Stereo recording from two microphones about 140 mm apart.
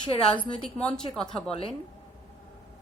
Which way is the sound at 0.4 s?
35° left (ahead or behind).